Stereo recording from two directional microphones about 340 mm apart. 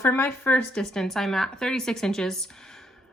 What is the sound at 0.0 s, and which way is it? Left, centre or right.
Speech, centre.